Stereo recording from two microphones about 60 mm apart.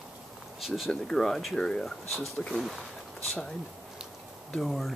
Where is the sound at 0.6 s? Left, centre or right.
Centre.